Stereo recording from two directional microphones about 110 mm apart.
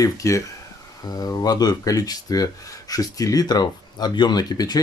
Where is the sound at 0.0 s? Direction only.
30° left (ahead or behind).